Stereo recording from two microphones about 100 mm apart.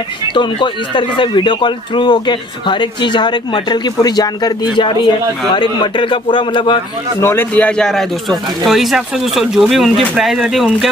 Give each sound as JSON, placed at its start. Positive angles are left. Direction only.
{"t": 0.3, "sound": "a man's voice", "side_deg": 50}
{"t": 7.2, "sound": "speech", "side_deg": 25}